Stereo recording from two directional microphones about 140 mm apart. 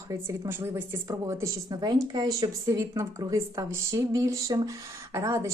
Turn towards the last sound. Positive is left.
turn(degrees=-20)  # may be behind; listen again after turning